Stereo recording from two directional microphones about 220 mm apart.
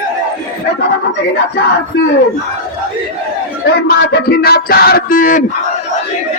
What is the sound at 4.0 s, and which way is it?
Music, 45° left (ahead or behind).